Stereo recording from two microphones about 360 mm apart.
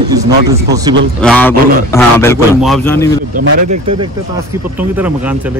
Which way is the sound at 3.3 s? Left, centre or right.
Right.